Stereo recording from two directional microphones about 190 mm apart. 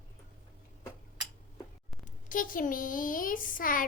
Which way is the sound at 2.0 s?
45° left (ahead or behind).